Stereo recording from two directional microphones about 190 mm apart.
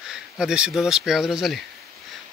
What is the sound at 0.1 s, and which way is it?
Speech, 5° right (ahead or behind).